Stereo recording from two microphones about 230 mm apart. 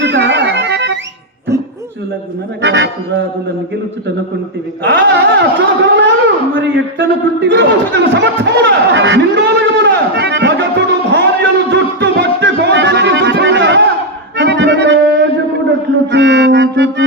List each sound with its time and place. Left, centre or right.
0.0 s music: right
2.6 s music: right
4.8 s a sound: right
11.7 s music: right
14.3 s accordion: right
16.1 s music: right